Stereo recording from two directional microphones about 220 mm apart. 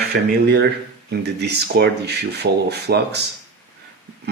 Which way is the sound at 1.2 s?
50° right (ahead or behind).